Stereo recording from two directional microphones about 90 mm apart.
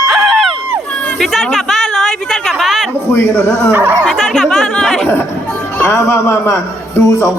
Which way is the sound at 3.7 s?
25° right (ahead or behind).